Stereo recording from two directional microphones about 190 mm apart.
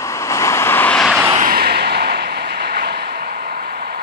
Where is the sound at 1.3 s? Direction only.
50° right (ahead or behind).